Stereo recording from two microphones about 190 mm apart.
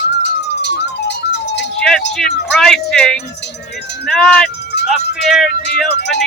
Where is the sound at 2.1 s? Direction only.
Centre (ahead or behind).